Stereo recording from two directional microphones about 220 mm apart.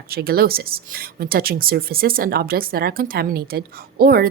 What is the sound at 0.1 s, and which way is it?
Speech, 45° right (ahead or behind).